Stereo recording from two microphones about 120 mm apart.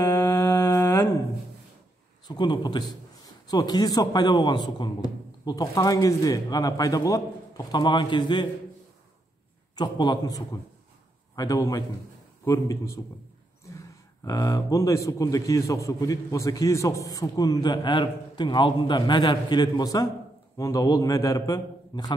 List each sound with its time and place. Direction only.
0.0 s mantra: 20° left (ahead or behind)
2.2 s a man's voice: 40° left (ahead or behind)
9.8 s a man's voice: 35° left (ahead or behind)
14.2 s a man's voice: 30° left (ahead or behind)